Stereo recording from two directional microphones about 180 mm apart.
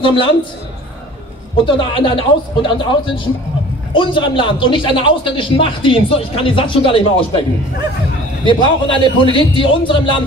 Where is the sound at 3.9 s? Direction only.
30° left (ahead or behind).